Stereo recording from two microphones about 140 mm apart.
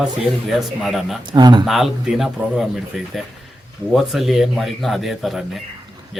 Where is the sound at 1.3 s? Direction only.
30° right (ahead or behind).